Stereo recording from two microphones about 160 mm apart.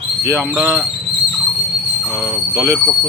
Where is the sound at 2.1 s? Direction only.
20° right (ahead or behind).